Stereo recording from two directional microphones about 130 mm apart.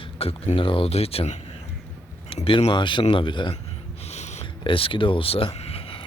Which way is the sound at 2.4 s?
50° left (ahead or behind).